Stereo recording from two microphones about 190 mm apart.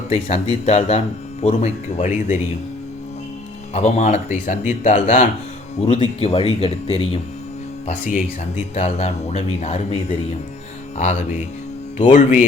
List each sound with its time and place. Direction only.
0.1 s speech: 35° left (ahead or behind)
3.8 s speech: 35° left (ahead or behind)
7.9 s speech: 40° left (ahead or behind)